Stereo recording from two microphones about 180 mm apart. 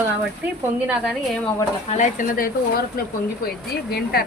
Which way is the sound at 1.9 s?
45° left (ahead or behind).